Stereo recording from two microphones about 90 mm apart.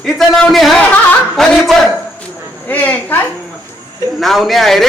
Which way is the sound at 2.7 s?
20° left (ahead or behind).